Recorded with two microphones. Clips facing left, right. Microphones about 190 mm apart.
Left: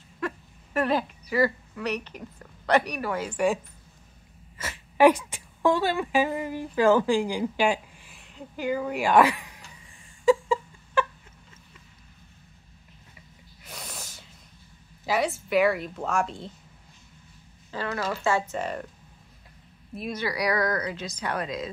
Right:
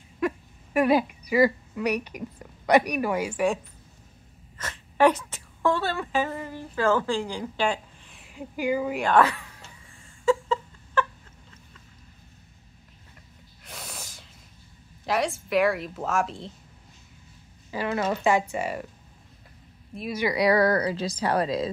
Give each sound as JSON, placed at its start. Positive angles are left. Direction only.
{"t": 0.7, "sound": "a woman's voice", "side_deg": -15}
{"t": 4.6, "sound": "a woman's voice", "side_deg": 10}
{"t": 8.2, "sound": "speech", "side_deg": -10}
{"t": 8.9, "sound": "speech", "side_deg": 10}
{"t": 10.2, "sound": "a sound", "side_deg": 10}
{"t": 13.7, "sound": "snort", "side_deg": 0}
{"t": 15.0, "sound": "a woman's voice", "side_deg": 0}
{"t": 17.8, "sound": "a woman's voice", "side_deg": -20}
{"t": 20.0, "sound": "a woman's voice", "side_deg": -5}
{"t": 20.2, "sound": "speech", "side_deg": -25}